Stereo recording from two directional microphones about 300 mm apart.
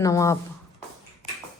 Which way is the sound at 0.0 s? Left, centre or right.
Centre.